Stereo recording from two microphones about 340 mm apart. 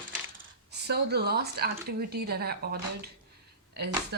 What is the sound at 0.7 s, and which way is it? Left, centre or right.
Speech, right.